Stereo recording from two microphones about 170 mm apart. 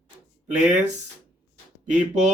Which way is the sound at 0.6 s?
45° right (ahead or behind).